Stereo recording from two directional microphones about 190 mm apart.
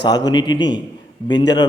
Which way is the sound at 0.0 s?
20° left (ahead or behind).